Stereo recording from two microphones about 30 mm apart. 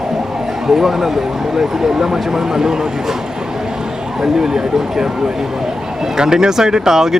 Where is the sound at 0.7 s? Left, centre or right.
Centre.